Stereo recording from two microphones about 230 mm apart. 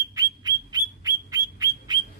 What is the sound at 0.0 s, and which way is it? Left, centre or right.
Bird, centre.